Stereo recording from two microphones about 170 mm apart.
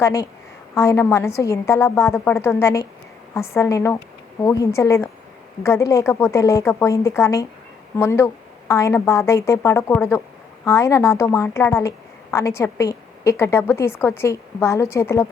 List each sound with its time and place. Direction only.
0.0 s a woman's voice: 15° left (ahead or behind)